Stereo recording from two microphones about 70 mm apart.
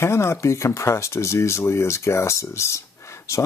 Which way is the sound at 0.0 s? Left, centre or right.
Left.